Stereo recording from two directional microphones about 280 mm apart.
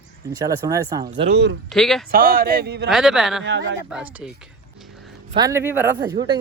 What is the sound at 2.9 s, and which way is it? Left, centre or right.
Speech, centre.